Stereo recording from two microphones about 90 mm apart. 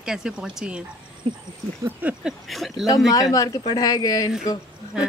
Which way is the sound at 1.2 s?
90° right.